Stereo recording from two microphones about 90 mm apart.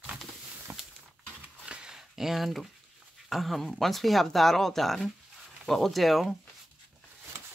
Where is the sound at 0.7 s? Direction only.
20° right (ahead or behind).